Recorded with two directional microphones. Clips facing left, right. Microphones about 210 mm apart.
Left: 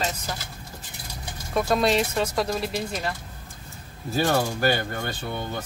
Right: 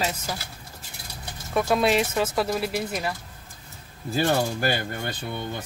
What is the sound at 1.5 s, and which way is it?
Cutlery, centre (ahead or behind).